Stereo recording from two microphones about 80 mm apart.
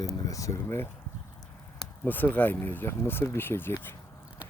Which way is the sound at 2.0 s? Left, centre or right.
Left.